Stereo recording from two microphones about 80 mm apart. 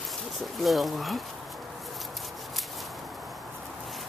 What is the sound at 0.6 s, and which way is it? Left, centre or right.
Speech, centre.